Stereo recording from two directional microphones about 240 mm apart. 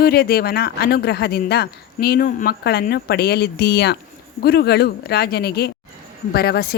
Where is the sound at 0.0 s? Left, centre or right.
Left.